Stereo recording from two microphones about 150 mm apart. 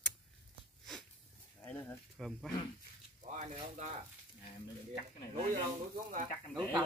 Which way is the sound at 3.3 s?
55° right (ahead or behind).